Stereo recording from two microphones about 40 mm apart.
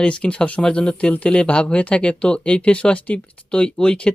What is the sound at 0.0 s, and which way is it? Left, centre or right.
Speech, left.